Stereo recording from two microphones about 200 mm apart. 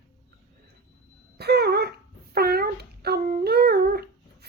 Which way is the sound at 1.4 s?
55° right (ahead or behind).